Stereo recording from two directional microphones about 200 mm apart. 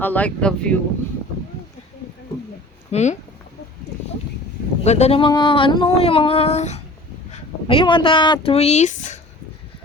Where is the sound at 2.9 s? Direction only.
35° left (ahead or behind).